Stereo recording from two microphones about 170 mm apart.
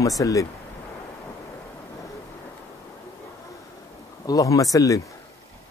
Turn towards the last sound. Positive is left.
turn(degrees=20)  # may be behind; listen again after turning